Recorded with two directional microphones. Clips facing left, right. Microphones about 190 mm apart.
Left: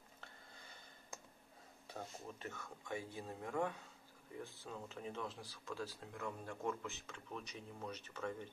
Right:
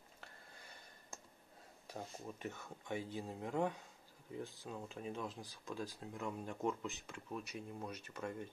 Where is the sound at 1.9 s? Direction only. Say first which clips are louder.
Right 2 dB; 15° right (ahead or behind).